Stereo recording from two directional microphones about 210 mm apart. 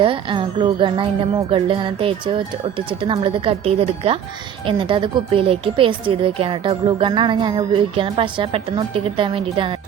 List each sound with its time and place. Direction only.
0.0 s a woman's voice: 25° right (ahead or behind)